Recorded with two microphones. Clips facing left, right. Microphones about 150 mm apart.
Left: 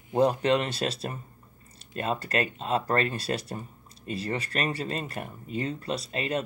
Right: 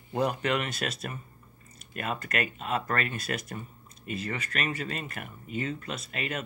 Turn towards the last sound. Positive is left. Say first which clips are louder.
# left 5 dB
turn(degrees=30)  # may be behind; listen again after turning